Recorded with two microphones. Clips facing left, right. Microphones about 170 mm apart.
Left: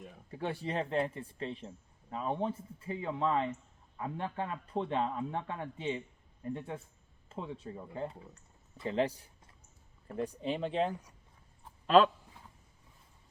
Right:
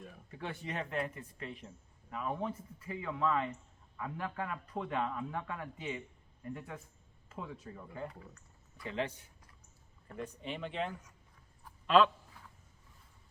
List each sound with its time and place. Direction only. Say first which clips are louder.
0.3 s speech: left 6 dB; 30° left (ahead or behind)